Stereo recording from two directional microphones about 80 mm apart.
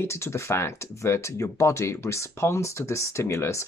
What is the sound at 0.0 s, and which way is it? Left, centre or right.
Speech, left.